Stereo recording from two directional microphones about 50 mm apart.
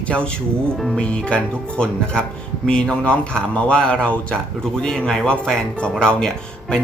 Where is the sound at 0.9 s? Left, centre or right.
Centre.